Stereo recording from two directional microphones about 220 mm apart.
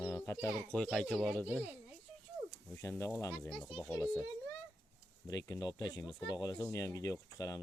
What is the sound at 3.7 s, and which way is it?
Speech, centre (ahead or behind).